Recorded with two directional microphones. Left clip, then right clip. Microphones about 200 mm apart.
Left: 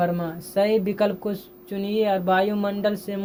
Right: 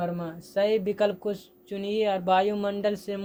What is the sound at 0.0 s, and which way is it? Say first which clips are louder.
Speech: left 7 dB; 35° right (ahead or behind).